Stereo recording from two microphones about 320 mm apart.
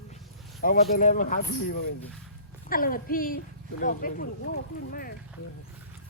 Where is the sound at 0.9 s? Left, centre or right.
Left.